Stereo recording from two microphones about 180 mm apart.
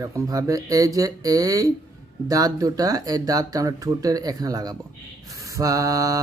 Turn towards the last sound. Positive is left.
turn(degrees=-20)  # may be behind; listen again after turning